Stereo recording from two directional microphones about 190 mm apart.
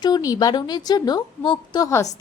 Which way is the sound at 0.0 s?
20° left (ahead or behind).